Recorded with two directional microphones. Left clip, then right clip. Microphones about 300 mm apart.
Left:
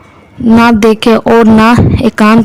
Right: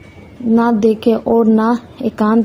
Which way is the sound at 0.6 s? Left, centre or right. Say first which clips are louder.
Left 7 dB; left.